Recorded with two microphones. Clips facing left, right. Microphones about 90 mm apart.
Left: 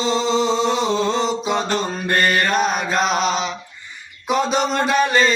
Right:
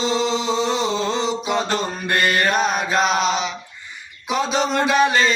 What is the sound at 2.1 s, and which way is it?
Mantra, 40° left (ahead or behind).